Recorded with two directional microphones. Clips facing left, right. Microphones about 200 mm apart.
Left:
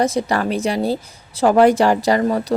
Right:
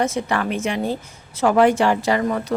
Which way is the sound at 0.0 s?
35° left (ahead or behind).